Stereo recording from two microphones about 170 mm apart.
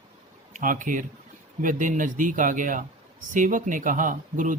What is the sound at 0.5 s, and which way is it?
A man's voice, 50° right (ahead or behind).